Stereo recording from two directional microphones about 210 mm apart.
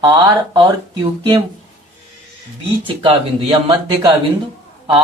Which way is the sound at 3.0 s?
20° right (ahead or behind).